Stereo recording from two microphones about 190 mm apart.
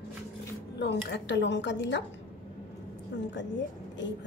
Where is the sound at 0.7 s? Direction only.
65° left (ahead or behind).